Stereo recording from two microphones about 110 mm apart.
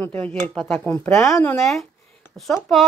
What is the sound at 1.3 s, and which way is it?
Speech, 25° left (ahead or behind).